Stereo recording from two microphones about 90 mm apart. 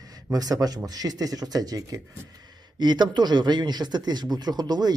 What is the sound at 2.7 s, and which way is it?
Speech, 55° right (ahead or behind).